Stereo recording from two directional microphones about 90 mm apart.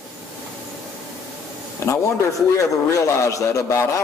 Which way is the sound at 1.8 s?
30° left (ahead or behind).